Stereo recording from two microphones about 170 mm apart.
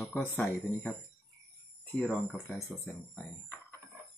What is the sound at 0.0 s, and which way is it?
Speech, 15° left (ahead or behind).